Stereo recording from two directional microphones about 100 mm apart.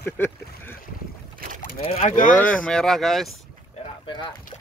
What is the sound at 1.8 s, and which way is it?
Speech, 80° left.